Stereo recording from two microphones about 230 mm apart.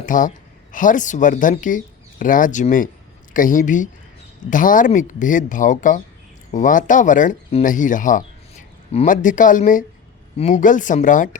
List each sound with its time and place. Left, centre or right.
0.0 s speech: left